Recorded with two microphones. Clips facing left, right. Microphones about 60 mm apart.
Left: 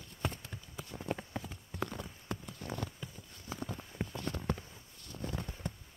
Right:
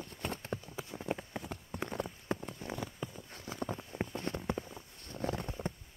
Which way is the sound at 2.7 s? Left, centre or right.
Centre.